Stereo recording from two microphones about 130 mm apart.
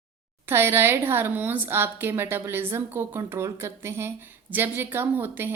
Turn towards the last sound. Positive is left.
turn(degrees=-15)  # may be behind; listen again after turning